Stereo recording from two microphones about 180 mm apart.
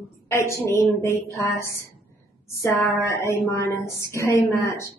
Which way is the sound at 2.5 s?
15° left (ahead or behind).